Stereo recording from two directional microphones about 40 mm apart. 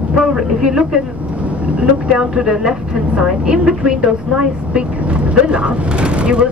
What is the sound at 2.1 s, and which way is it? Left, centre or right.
Speech, centre.